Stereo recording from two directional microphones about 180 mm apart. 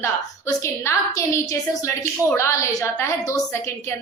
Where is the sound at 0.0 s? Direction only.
15° left (ahead or behind).